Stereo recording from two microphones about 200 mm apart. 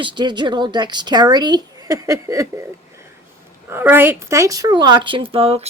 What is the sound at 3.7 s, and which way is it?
Speech, 10° right (ahead or behind).